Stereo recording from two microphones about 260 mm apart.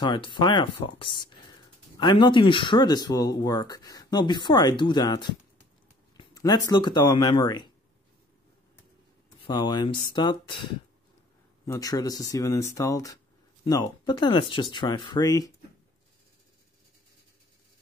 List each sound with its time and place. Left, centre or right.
0.0 s speech: centre
9.5 s speech: centre
11.6 s speech: centre